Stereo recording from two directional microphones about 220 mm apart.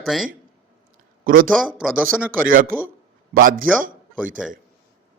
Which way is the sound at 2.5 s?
40° right (ahead or behind).